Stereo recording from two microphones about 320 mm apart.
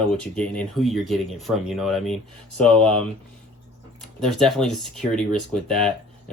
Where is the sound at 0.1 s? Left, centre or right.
Centre.